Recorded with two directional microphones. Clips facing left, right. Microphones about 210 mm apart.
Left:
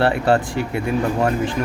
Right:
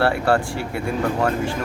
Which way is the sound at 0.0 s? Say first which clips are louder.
Left 2 dB; 20° left (ahead or behind).